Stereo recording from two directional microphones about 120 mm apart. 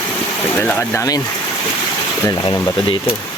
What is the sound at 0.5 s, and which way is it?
Speech, 15° left (ahead or behind).